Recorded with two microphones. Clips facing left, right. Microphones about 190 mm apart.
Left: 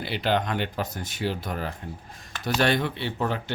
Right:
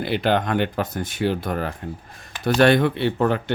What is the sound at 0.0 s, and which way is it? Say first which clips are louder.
Speech: right 5 dB; 55° right (ahead or behind).